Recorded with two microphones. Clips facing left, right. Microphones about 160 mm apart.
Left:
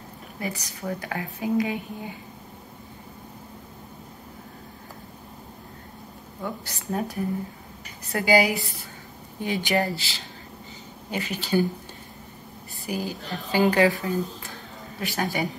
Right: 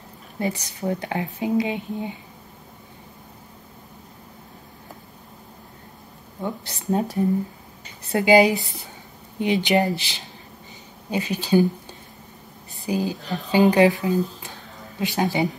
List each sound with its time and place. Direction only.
0.4 s speech: 20° right (ahead or behind)
6.4 s speech: 25° right (ahead or behind)
9.7 s speech: 20° right (ahead or behind)
12.8 s speech: 20° right (ahead or behind)